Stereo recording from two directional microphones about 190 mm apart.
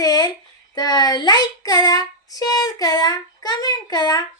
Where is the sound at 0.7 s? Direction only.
20° left (ahead or behind).